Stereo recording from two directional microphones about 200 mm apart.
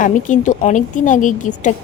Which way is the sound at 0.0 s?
40° left (ahead or behind).